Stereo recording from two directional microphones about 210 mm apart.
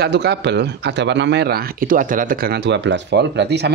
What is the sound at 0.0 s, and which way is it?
Speech, 55° right (ahead or behind).